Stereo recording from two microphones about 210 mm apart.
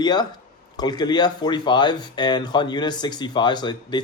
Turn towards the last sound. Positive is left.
turn(degrees=20)  # may be behind; listen again after turning